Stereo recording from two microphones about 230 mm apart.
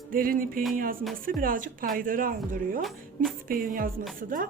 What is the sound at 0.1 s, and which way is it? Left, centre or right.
Speech, right.